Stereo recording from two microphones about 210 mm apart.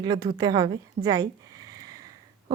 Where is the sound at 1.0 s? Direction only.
20° right (ahead or behind).